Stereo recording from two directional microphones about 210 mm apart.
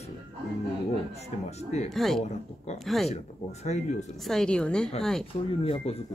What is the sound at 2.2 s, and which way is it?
Speech, 35° left (ahead or behind).